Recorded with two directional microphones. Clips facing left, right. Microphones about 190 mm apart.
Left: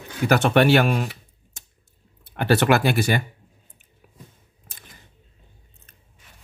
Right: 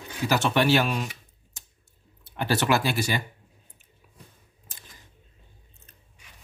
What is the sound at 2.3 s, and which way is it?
Speech, 60° left (ahead or behind).